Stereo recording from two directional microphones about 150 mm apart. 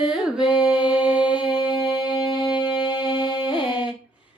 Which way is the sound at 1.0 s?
10° right (ahead or behind).